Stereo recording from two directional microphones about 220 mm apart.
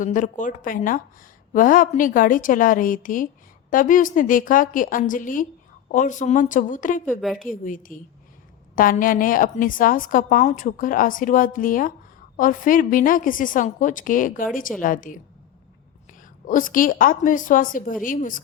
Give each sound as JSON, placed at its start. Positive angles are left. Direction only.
{"t": 0.0, "sound": "a woman's voice", "side_deg": 35}
{"t": 7.1, "sound": "a woman's voice", "side_deg": 0}
{"t": 7.3, "sound": "a woman's voice", "side_deg": 40}
{"t": 16.5, "sound": "a woman's voice", "side_deg": 40}